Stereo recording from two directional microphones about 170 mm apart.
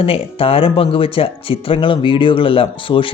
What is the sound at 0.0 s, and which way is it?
Speech, 35° left (ahead or behind).